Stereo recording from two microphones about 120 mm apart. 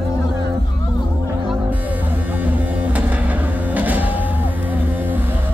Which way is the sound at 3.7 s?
15° right (ahead or behind).